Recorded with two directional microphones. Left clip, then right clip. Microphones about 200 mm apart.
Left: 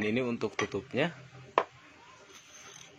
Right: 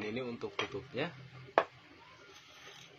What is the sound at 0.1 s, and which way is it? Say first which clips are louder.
Speech: left 8 dB; 40° left (ahead or behind).